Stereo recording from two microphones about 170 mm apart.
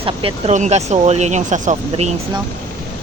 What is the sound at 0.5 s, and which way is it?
Speech, 45° right (ahead or behind).